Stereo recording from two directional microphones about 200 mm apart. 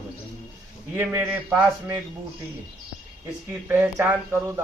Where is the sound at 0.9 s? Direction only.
10° right (ahead or behind).